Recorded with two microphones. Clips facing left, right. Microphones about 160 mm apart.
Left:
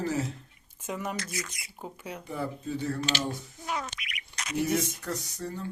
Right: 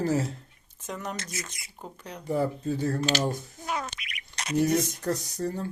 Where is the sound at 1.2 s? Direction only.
25° right (ahead or behind).